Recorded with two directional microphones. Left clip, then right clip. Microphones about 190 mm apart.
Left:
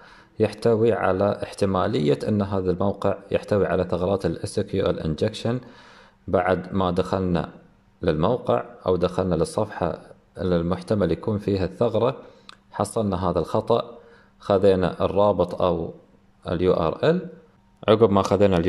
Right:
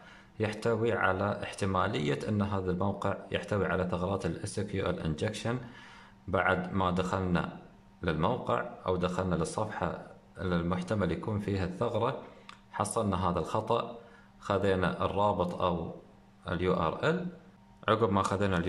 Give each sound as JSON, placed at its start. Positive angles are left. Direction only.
{"t": 0.4, "sound": "speech", "side_deg": 25}